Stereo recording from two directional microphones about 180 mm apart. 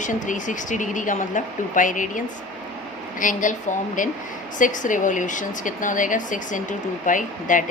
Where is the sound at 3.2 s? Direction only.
45° left (ahead or behind).